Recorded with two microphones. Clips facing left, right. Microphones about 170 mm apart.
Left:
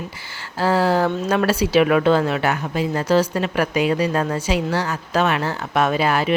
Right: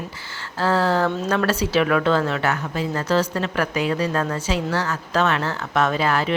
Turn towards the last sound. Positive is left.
turn(degrees=15)  # may be behind; listen again after turning